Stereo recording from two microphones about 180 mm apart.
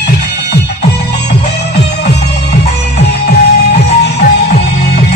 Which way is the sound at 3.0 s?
65° left (ahead or behind).